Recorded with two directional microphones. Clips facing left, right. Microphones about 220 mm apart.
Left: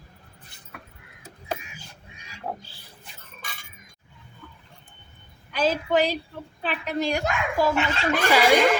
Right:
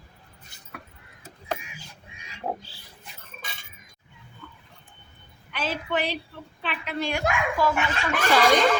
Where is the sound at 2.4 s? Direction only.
15° right (ahead or behind).